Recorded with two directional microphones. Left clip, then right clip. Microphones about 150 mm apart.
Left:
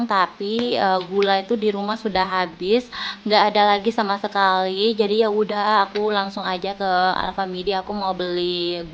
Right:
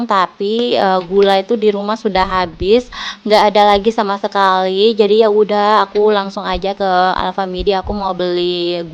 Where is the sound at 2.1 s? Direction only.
30° right (ahead or behind).